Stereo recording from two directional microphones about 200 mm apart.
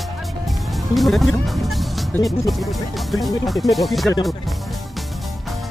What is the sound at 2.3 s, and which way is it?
Speech, centre (ahead or behind).